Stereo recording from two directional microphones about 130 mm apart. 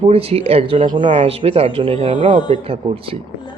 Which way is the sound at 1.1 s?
50° right (ahead or behind).